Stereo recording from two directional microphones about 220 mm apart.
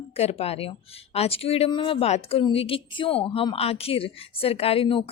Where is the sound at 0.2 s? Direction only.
30° left (ahead or behind).